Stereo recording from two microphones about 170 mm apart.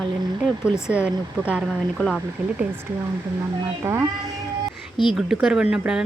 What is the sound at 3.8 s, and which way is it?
Speech, 15° right (ahead or behind).